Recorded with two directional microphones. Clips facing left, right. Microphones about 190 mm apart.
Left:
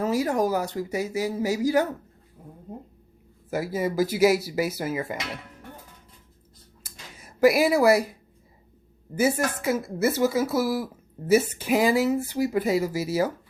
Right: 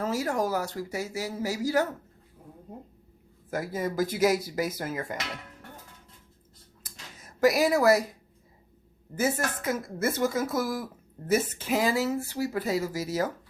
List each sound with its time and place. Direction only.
0.0 s speech: 15° left (ahead or behind)
3.5 s speech: 5° left (ahead or behind)
6.8 s a sound: 10° left (ahead or behind)
9.1 s speech: 10° left (ahead or behind)